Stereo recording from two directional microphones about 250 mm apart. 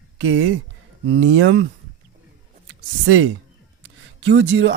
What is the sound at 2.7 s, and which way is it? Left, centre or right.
Speech, right.